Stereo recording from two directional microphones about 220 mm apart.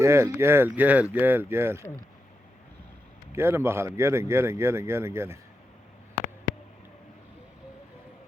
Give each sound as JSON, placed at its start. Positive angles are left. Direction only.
{"t": 0.0, "sound": "speech", "side_deg": -10}
{"t": 3.3, "sound": "speech", "side_deg": -10}